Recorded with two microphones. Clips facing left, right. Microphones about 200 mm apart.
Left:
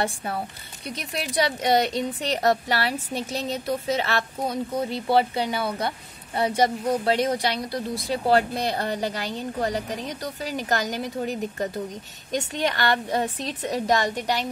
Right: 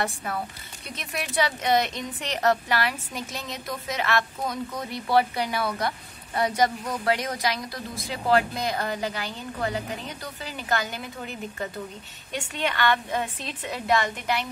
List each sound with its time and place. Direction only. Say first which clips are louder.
0.0 s a woman's voice: left 2 dB; 30° left (ahead or behind)